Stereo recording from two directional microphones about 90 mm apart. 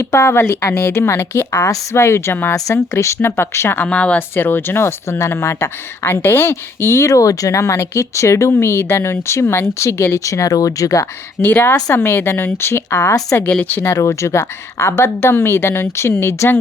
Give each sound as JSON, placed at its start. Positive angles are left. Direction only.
{"t": 0.0, "sound": "a woman's voice", "side_deg": 30}
{"t": 3.8, "sound": "speech", "side_deg": 15}
{"t": 11.4, "sound": "a woman's voice", "side_deg": 20}
{"t": 13.3, "sound": "a woman's voice", "side_deg": 15}
{"t": 13.9, "sound": "a woman's voice", "side_deg": 35}